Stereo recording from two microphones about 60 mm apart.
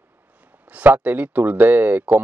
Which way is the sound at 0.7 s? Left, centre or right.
Right.